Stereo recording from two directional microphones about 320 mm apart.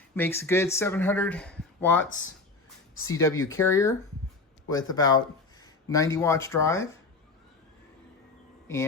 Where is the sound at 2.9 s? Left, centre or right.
Left.